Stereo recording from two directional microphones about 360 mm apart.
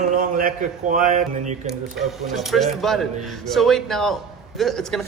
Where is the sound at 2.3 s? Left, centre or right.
Centre.